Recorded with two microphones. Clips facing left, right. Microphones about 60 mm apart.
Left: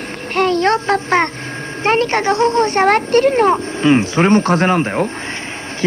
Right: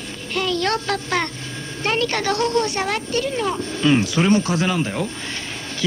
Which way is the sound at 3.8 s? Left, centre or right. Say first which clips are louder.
Left 4 dB; left.